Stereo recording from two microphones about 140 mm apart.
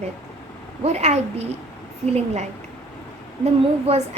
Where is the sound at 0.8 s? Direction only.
50° right (ahead or behind).